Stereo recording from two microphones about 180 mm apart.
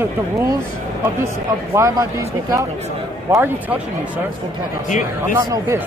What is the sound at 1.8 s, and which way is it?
Speech, 15° right (ahead or behind).